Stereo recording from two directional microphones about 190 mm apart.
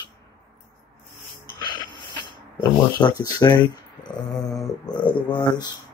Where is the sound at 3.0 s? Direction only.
20° left (ahead or behind).